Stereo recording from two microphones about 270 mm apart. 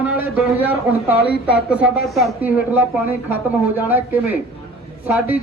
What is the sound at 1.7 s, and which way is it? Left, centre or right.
Speech, centre.